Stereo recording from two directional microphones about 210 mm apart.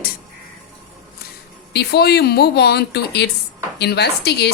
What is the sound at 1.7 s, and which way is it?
Speech, 50° left (ahead or behind).